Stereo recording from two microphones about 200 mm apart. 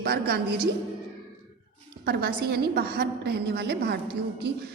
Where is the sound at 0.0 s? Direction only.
50° right (ahead or behind).